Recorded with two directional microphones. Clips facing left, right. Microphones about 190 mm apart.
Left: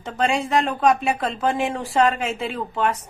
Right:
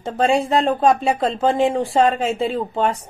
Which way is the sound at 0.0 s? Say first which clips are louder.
Right 5 dB; 35° right (ahead or behind).